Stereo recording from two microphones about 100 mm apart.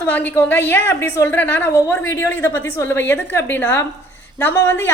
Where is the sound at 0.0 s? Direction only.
20° left (ahead or behind).